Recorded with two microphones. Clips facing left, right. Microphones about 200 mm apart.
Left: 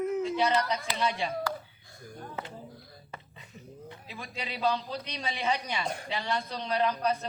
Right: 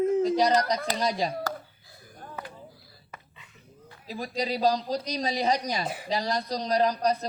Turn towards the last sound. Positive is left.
turn(degrees=-35)  # may be behind; listen again after turning